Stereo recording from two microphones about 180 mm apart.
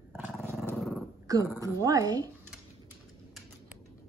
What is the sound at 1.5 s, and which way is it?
Speech, 20° right (ahead or behind).